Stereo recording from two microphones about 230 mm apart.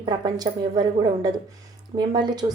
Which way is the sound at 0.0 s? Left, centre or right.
Centre.